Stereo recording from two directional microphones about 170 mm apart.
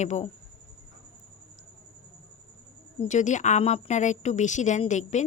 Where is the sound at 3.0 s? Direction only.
45° left (ahead or behind).